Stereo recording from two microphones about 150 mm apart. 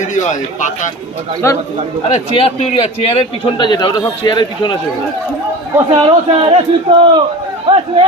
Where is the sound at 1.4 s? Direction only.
15° left (ahead or behind).